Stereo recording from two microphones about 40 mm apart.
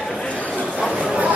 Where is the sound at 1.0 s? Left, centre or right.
Right.